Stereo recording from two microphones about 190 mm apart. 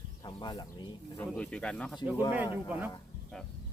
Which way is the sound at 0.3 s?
25° left (ahead or behind).